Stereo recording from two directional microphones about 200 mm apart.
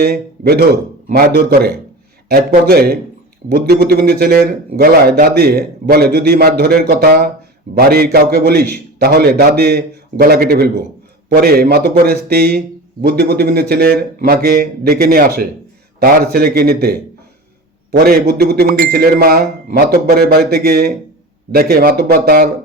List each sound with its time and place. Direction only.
0.0 s a man's voice: 50° right (ahead or behind)